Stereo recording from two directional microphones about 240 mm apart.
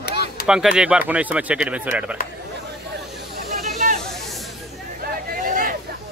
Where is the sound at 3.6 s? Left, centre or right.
Right.